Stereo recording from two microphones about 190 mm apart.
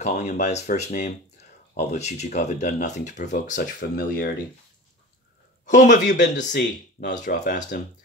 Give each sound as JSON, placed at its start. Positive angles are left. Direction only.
{"t": 0.0, "sound": "speech", "side_deg": 35}
{"t": 5.7, "sound": "speech", "side_deg": 40}